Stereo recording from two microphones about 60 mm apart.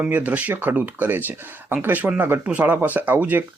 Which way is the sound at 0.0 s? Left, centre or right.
Right.